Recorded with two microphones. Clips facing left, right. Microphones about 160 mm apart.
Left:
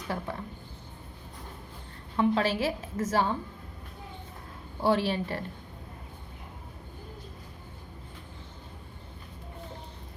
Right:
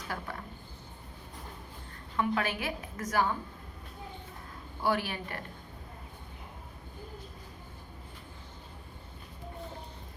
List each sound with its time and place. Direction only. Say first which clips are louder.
0.1 s a woman's voice: left 4 dB; 25° left (ahead or behind)
2.1 s a woman's voice: left 5 dB; 30° left (ahead or behind)
4.8 s a woman's voice: left 5 dB; 25° left (ahead or behind)